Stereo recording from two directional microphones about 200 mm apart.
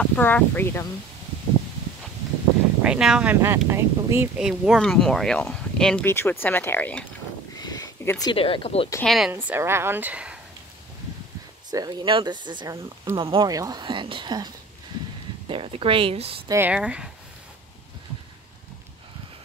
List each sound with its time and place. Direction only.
0.0 s speech: 10° left (ahead or behind)
2.8 s speech: 5° right (ahead or behind)
7.5 s a sound: 20° left (ahead or behind)
8.3 s speech: 25° left (ahead or behind)
9.0 s speech: centre (ahead or behind)
11.7 s speech: 20° right (ahead or behind)
16.4 s speech: 10° right (ahead or behind)